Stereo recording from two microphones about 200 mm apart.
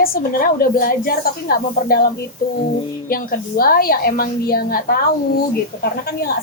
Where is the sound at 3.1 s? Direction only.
45° left (ahead or behind).